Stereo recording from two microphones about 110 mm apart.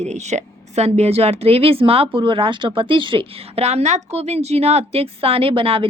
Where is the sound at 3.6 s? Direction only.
85° right.